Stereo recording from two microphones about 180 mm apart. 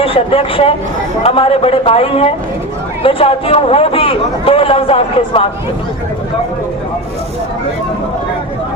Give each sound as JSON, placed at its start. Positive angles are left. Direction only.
{"t": 0.0, "sound": "speech", "side_deg": 30}